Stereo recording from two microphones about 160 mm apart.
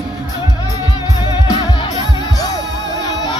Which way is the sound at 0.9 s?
30° left (ahead or behind).